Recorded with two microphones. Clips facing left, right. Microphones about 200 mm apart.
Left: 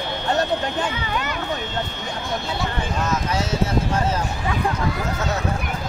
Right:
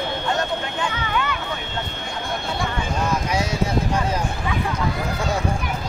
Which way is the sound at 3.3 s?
15° right (ahead or behind).